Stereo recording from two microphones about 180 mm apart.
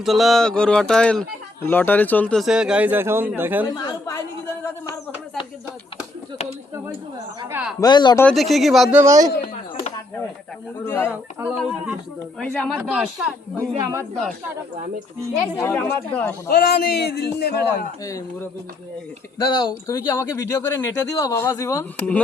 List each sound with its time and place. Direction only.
0.0 s speech: centre (ahead or behind)
3.8 s speech: 20° left (ahead or behind)
7.4 s speech: 10° right (ahead or behind)
7.8 s speech: 25° left (ahead or behind)
8.2 s speech: 5° left (ahead or behind)
9.0 s a man's voice: 20° right (ahead or behind)
10.8 s speech: 15° left (ahead or behind)
11.1 s speech: 5° right (ahead or behind)
12.4 s speech: 5° left (ahead or behind)
12.9 s speech: 5° right (ahead or behind)
13.6 s speech: 15° right (ahead or behind)
15.7 s speech: 5° left (ahead or behind)
16.5 s a man's voice: 60° left (ahead or behind)
18.0 s speech: 20° left (ahead or behind)